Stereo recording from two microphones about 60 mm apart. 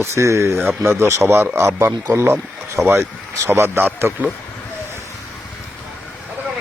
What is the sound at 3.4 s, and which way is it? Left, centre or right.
Speech, right.